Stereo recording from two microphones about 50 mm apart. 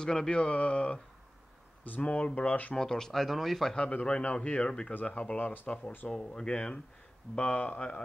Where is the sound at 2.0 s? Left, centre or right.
Left.